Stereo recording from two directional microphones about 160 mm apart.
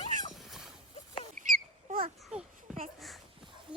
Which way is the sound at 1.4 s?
60° right (ahead or behind).